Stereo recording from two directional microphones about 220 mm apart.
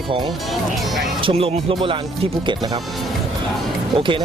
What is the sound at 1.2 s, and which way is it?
Speech, 25° right (ahead or behind).